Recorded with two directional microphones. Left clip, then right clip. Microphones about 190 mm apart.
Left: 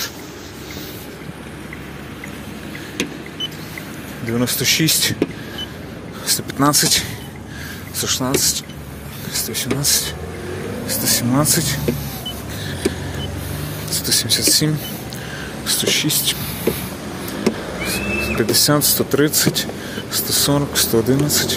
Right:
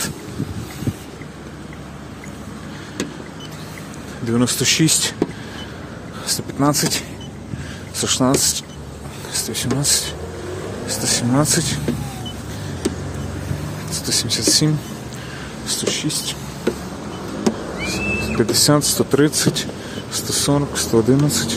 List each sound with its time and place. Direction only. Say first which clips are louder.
4.3 s speech: even; 35° right (ahead or behind)
6.6 s speech: left 3 dB; 10° right (ahead or behind)
8.0 s speech: right 2 dB; 25° right (ahead or behind)
13.8 s speech: left 3 dB; 20° right (ahead or behind)
17.8 s speech: left 1 dB; 15° right (ahead or behind)